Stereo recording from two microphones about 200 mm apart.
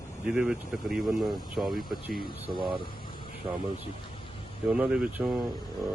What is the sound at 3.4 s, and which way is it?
Speech, 25° right (ahead or behind).